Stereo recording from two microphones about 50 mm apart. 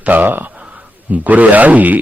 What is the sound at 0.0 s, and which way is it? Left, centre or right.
A man's voice, right.